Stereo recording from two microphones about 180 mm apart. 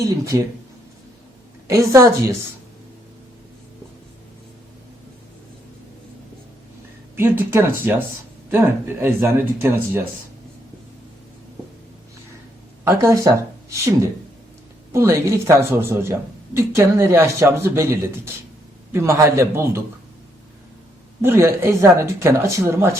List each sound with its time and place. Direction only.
0.3 s speech: 20° right (ahead or behind)
1.6 s speech: 15° right (ahead or behind)
7.2 s speech: 10° right (ahead or behind)
12.8 s speech: 15° right (ahead or behind)
14.9 s speech: 15° right (ahead or behind)
21.2 s speech: 15° right (ahead or behind)